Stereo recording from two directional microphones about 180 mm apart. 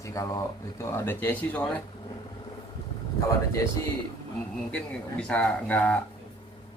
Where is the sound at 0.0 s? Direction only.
15° left (ahead or behind).